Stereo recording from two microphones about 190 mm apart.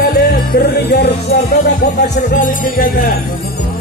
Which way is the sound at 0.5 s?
60° left (ahead or behind).